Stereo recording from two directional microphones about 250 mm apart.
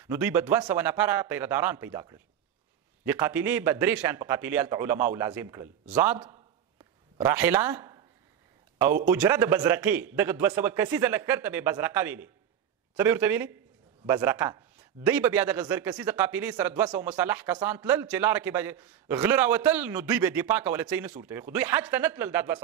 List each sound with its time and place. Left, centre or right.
0.0 s a man's voice: centre
9.0 s a man's voice: centre